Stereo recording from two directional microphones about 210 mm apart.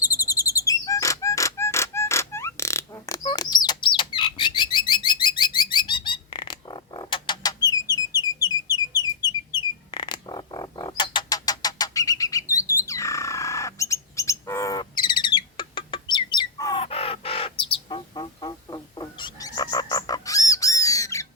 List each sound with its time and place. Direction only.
0.0 s bird: 15° left (ahead or behind)
9.6 s music: 20° left (ahead or behind)